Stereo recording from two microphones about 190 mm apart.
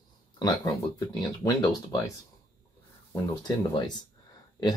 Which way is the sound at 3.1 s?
25° left (ahead or behind).